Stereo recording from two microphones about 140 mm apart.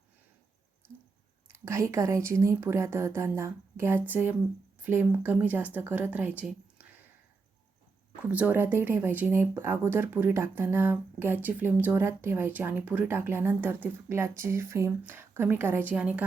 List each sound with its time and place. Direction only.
1.5 s a woman's voice: 20° right (ahead or behind)
8.2 s speech: 10° right (ahead or behind)